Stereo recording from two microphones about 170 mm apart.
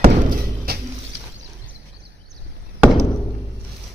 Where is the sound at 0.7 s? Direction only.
65° right (ahead or behind).